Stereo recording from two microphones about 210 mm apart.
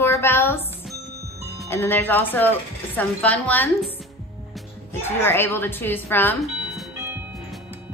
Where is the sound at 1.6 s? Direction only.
10° left (ahead or behind).